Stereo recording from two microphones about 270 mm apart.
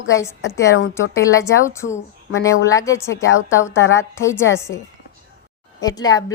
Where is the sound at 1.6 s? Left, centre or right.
Centre.